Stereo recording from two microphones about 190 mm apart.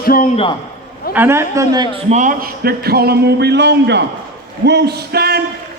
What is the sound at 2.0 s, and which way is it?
Speech, 40° right (ahead or behind).